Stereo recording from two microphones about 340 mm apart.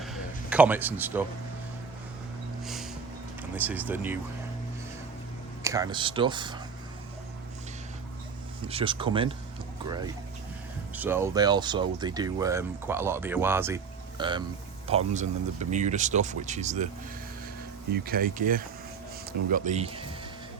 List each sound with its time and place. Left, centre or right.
0.0 s a sound: centre
2.6 s music: centre
3.5 s speech: centre
5.6 s speech: centre
8.6 s speech: centre
10.9 s speech: centre
17.9 s speech: right